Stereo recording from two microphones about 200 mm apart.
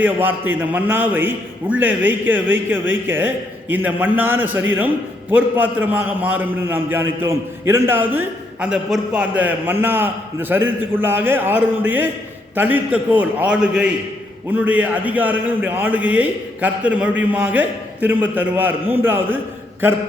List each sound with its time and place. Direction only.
0.0 s a man's voice: 10° right (ahead or behind)